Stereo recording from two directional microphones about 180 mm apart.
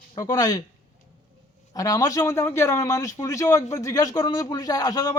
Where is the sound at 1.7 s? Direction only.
20° left (ahead or behind).